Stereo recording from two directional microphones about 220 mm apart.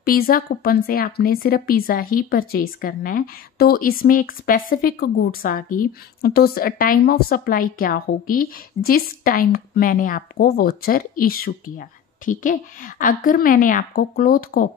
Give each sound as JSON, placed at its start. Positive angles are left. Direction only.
{"t": 0.0, "sound": "a woman's voice", "side_deg": 45}